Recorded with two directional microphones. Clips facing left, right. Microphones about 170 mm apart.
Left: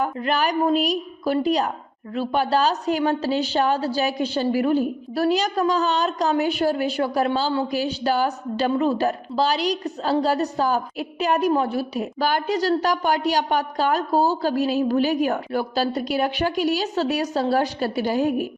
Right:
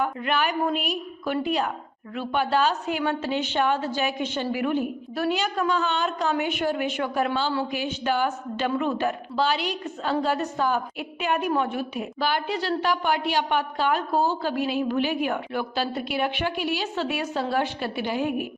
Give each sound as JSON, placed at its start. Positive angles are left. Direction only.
{"t": 0.0, "sound": "a woman's voice", "side_deg": 40}